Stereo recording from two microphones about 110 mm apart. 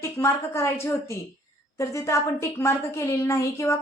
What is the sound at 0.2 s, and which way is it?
Speech, 25° left (ahead or behind).